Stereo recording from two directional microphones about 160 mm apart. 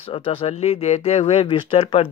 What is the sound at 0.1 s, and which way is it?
Speech, 35° left (ahead or behind).